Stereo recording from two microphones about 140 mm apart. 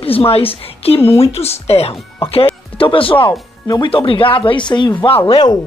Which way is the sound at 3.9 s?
40° left (ahead or behind).